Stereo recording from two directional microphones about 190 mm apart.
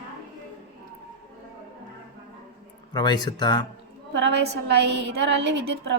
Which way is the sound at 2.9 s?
20° left (ahead or behind).